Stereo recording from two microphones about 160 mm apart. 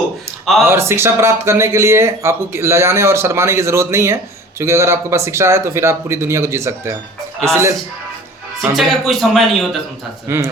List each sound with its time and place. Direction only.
0.7 s speech: 15° right (ahead or behind)
8.7 s a man's voice: centre (ahead or behind)
10.2 s speech: 15° right (ahead or behind)